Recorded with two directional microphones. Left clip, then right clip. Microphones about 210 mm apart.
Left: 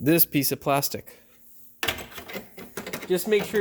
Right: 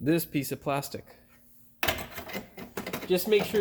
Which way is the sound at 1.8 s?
10° right (ahead or behind).